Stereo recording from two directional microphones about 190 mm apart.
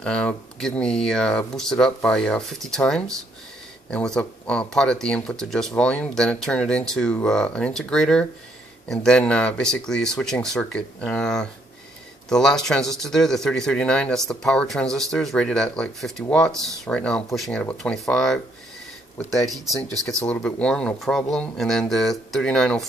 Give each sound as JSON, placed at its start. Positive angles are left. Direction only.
{"t": 0.0, "sound": "speech", "side_deg": 5}